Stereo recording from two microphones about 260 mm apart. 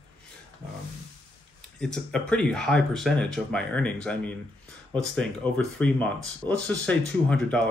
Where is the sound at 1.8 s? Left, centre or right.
Centre.